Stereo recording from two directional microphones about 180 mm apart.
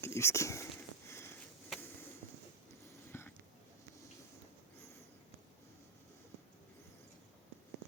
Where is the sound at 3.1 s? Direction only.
15° left (ahead or behind).